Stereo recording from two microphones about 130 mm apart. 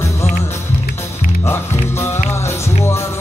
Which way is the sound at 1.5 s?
20° left (ahead or behind).